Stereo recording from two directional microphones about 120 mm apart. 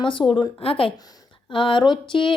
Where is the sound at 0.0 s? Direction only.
45° left (ahead or behind).